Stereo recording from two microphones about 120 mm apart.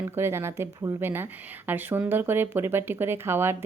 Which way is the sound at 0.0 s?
20° right (ahead or behind).